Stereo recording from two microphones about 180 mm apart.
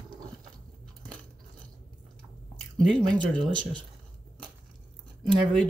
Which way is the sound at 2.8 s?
25° right (ahead or behind).